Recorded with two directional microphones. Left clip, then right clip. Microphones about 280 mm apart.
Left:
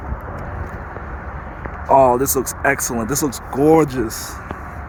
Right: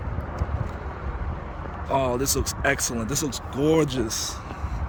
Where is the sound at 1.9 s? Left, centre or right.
Centre.